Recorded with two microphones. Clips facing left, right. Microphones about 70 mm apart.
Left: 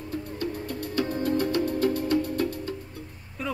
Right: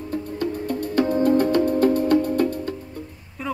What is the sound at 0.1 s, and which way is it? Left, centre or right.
Music, right.